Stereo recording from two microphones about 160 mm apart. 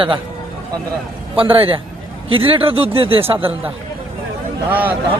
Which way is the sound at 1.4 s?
35° right (ahead or behind).